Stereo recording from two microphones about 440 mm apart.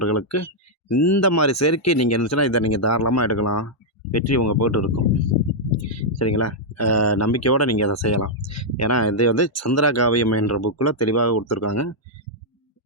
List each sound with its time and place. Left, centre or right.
0.0 s speech: left
5.9 s speech: left